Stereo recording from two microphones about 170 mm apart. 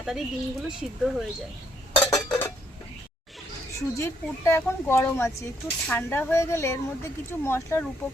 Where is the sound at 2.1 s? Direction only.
20° left (ahead or behind).